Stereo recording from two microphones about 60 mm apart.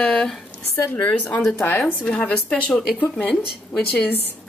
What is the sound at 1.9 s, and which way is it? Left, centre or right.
Speech, left.